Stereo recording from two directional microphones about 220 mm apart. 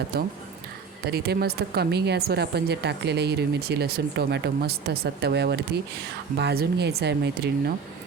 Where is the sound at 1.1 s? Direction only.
45° right (ahead or behind).